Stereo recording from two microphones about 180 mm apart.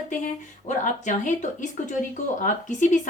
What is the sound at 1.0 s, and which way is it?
Speech, 45° left (ahead or behind).